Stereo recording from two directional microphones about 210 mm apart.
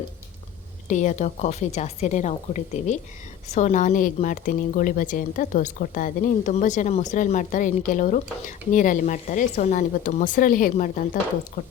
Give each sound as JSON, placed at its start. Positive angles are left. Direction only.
{"t": 0.9, "sound": "speech", "side_deg": 35}